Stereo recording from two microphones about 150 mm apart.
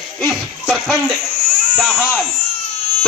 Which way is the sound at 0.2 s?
10° left (ahead or behind).